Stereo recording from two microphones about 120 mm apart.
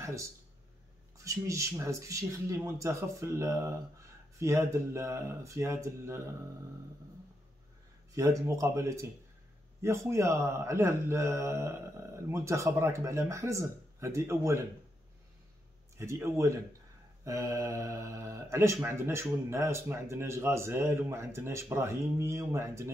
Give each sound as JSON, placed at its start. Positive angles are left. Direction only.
{"t": 0.0, "sound": "speech", "side_deg": -25}
{"t": 8.1, "sound": "speech", "side_deg": -30}
{"t": 16.0, "sound": "speech", "side_deg": -20}